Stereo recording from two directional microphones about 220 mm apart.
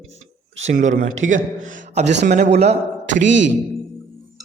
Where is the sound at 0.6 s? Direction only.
35° right (ahead or behind).